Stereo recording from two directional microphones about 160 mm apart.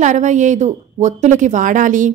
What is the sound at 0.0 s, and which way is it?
Speech, 50° right (ahead or behind).